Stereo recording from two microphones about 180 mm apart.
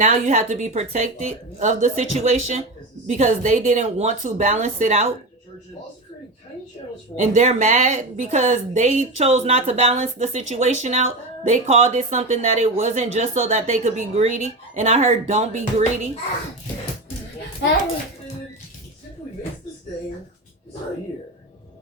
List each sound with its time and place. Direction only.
0.0 s speech: 40° right (ahead or behind)
7.2 s speech: 45° right (ahead or behind)